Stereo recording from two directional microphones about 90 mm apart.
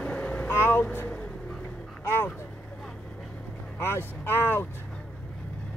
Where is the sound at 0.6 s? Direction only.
25° left (ahead or behind).